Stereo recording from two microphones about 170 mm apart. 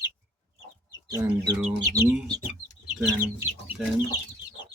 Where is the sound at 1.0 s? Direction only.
20° right (ahead or behind).